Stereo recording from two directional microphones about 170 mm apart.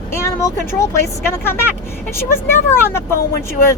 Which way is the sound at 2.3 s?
15° left (ahead or behind).